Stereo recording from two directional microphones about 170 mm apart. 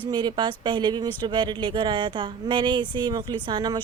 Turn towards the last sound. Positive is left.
turn(degrees=-25)  # may be behind; listen again after turning